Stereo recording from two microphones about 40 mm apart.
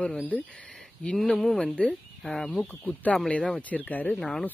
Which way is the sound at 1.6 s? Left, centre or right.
Left.